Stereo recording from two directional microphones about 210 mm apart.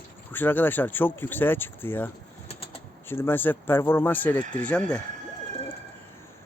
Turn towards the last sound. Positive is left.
turn(degrees=5)  # may be behind; listen again after turning